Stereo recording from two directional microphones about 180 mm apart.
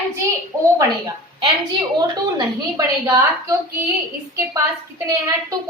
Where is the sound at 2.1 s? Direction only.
25° right (ahead or behind).